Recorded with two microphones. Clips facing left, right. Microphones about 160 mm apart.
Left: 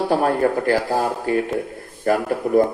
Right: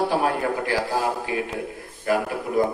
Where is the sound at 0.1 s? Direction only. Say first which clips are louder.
Left 5 dB; 45° left (ahead or behind).